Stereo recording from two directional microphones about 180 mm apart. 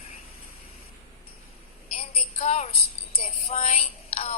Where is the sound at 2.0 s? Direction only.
40° left (ahead or behind).